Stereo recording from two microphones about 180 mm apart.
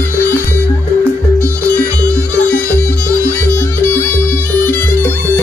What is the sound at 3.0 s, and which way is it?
Music, 10° left (ahead or behind).